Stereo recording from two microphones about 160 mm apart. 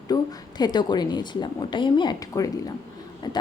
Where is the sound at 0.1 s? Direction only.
25° left (ahead or behind).